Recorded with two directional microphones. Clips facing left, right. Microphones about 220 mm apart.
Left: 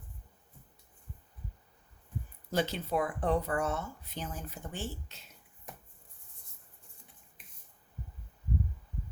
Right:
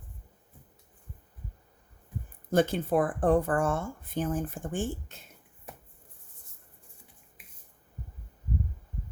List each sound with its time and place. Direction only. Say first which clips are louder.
2.5 s speech: right 7 dB; 50° right (ahead or behind)